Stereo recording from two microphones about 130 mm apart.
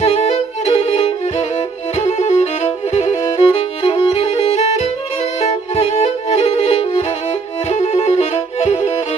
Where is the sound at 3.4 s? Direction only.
45° left (ahead or behind).